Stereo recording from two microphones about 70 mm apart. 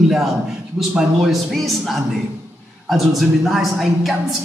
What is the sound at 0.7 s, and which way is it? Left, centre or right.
A woman's voice, centre.